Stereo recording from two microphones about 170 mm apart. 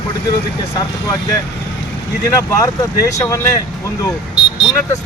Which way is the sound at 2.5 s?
20° left (ahead or behind).